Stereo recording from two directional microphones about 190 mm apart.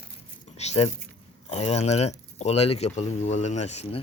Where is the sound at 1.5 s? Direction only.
35° left (ahead or behind).